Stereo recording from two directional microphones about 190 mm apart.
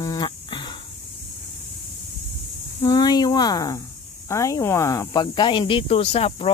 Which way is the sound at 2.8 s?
20° left (ahead or behind).